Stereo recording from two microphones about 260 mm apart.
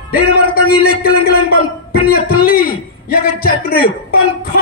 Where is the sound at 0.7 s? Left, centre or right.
Left.